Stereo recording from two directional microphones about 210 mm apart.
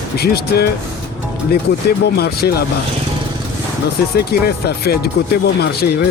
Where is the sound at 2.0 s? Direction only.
50° left (ahead or behind).